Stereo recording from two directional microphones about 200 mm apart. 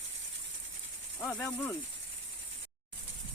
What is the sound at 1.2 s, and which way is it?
Snake, 10° left (ahead or behind).